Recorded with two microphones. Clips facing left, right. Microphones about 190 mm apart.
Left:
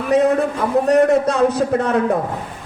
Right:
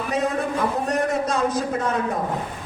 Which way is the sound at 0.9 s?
65° left (ahead or behind).